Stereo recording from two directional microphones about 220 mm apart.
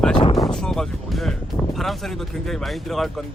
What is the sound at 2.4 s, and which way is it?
Speech, centre (ahead or behind).